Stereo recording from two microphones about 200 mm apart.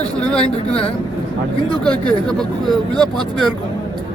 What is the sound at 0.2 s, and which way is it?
Speech, 5° left (ahead or behind).